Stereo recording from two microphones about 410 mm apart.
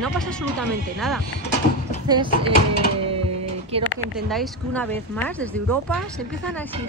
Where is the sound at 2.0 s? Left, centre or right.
Centre.